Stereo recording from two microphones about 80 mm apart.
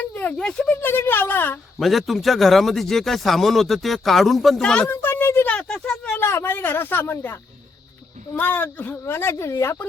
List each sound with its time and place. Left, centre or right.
0.0 s a sound: left
0.3 s speech: centre
0.7 s speech: left
1.8 s a man's voice: centre
4.9 s a sound: left
5.5 s speech: centre
6.1 s speech: left
8.4 s speech: left